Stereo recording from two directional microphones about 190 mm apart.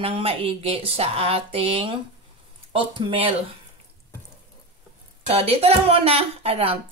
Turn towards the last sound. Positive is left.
turn(degrees=-30)  # may be behind; listen again after turning